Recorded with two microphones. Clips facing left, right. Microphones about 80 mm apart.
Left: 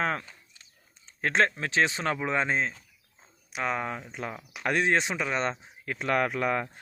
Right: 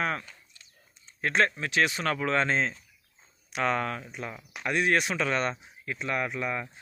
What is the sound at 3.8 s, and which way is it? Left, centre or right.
Speech, left.